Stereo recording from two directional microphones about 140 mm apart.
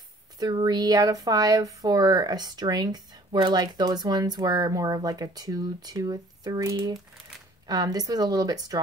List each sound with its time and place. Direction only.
0.4 s speech: 30° right (ahead or behind)